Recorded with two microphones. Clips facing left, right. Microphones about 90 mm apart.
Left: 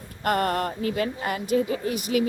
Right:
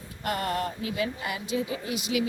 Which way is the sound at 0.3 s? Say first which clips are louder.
Left 5 dB; 50° left (ahead or behind).